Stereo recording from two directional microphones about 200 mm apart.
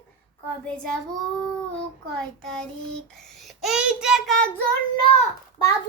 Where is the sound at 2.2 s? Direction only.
5° left (ahead or behind).